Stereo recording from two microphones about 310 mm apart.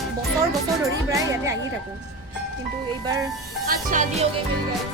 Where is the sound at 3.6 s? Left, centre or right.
Right.